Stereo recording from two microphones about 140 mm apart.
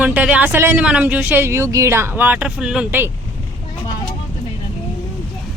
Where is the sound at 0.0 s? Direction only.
10° right (ahead or behind).